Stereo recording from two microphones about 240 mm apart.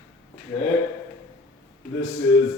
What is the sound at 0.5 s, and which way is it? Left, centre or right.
Speech, centre.